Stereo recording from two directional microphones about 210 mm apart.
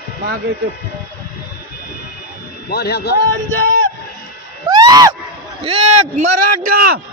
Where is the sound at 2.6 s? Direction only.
50° left (ahead or behind).